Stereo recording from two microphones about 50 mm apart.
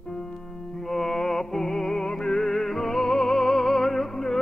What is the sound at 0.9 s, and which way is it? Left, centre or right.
Music, centre.